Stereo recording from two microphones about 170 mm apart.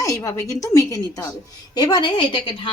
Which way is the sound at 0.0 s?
20° left (ahead or behind).